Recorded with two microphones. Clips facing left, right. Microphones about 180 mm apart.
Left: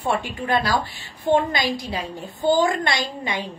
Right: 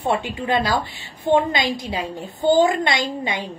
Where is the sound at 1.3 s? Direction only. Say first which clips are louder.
Right 2 dB; 20° right (ahead or behind).